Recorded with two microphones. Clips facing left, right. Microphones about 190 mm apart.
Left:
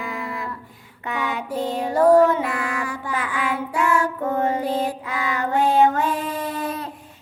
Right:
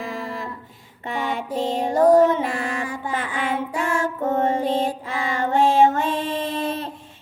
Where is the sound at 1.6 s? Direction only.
20° right (ahead or behind).